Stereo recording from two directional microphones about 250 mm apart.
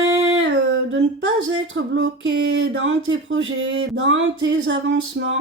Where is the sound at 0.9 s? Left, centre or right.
Right.